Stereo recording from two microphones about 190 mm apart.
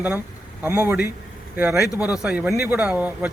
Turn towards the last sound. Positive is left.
turn(degrees=-5)  # may be behind; listen again after turning